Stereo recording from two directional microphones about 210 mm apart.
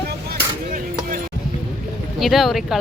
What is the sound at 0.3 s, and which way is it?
Chop, 40° right (ahead or behind).